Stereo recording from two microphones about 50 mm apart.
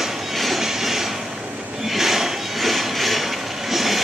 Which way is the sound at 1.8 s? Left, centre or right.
Centre.